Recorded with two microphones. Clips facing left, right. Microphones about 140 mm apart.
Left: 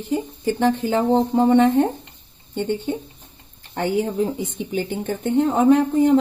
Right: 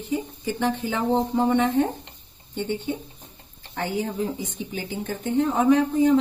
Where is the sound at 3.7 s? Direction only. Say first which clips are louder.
Left 6 dB; 60° left (ahead or behind).